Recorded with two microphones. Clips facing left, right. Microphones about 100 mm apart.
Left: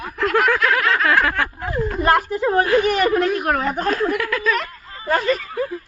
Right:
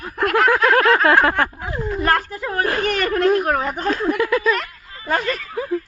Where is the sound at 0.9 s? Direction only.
30° right (ahead or behind).